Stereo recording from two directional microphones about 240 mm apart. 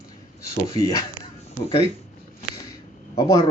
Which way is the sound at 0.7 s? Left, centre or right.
Centre.